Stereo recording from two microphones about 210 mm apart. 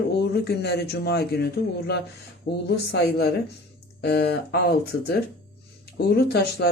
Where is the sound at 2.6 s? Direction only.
55° left (ahead or behind).